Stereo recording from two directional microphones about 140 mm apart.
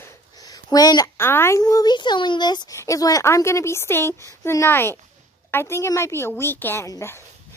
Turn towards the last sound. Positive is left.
turn(degrees=20)  # may be behind; listen again after turning